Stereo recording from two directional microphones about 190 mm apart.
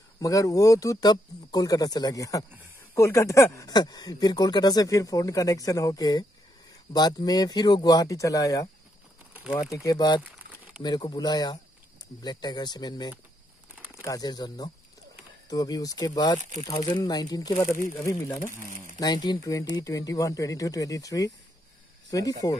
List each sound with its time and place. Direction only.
0.2 s speech: 15° left (ahead or behind)
10.2 s crumpling: 10° right (ahead or behind)
10.8 s speech: 20° left (ahead or behind)
13.7 s crumpling: 10° right (ahead or behind)
14.0 s speech: 20° left (ahead or behind)